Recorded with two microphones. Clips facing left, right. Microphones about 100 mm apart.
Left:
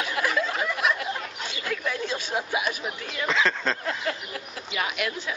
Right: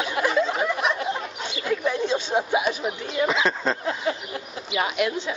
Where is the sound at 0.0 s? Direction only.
25° right (ahead or behind).